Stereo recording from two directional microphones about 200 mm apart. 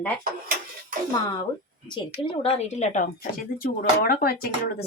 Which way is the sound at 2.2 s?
30° left (ahead or behind).